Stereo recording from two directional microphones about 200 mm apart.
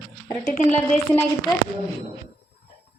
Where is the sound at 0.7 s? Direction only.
5° left (ahead or behind).